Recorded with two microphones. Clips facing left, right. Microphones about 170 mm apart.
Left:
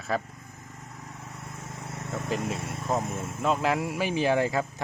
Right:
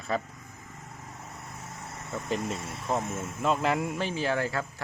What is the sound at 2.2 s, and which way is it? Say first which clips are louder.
Speech: left 1 dB; 5° left (ahead or behind).